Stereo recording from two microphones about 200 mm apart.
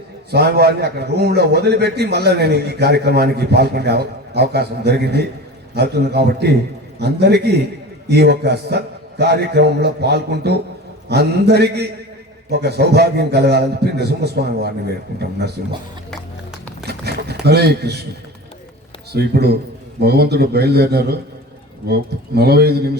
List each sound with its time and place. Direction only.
0.3 s a man's voice: 55° right (ahead or behind)
16.8 s a sound: 55° right (ahead or behind)
17.4 s a man's voice: 55° right (ahead or behind)
19.1 s a man's voice: 55° right (ahead or behind)